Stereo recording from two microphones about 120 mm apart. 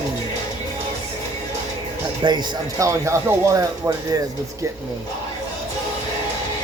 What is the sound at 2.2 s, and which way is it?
Speech, 30° right (ahead or behind).